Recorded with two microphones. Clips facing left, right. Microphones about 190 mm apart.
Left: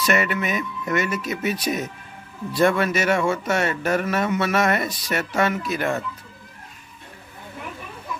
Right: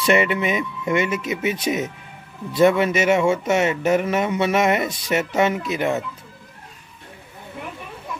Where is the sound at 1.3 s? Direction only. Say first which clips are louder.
Right 2 dB; 10° right (ahead or behind).